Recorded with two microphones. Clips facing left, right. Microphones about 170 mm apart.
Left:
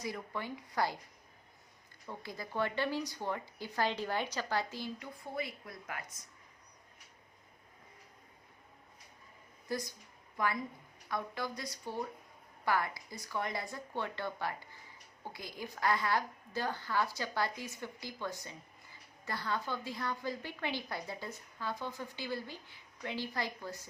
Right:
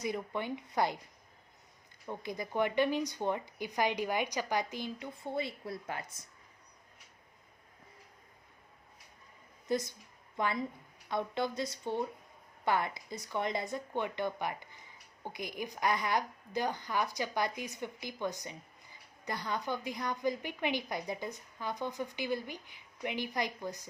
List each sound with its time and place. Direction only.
0.0 s speech: 20° right (ahead or behind)
2.0 s speech: 20° right (ahead or behind)
9.6 s a woman's voice: 20° right (ahead or behind)